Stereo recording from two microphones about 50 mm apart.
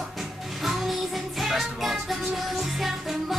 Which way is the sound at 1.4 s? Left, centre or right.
Centre.